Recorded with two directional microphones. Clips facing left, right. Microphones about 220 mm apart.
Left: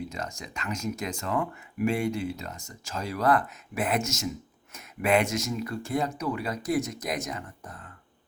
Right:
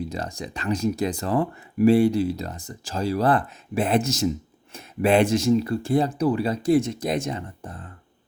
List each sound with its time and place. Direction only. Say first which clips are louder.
0.1 s speech: right 6 dB; 35° right (ahead or behind)